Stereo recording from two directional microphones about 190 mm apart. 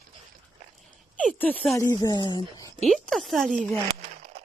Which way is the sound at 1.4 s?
5° left (ahead or behind).